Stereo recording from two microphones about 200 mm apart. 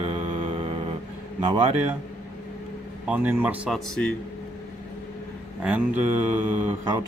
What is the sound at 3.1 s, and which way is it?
Speech, 10° right (ahead or behind).